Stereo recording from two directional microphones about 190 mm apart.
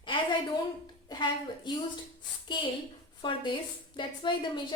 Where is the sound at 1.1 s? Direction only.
20° left (ahead or behind).